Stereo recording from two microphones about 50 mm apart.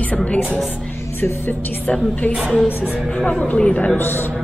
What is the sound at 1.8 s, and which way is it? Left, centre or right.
Speech, left.